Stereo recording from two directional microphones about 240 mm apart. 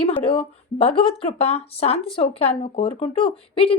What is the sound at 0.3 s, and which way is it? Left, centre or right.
Speech, left.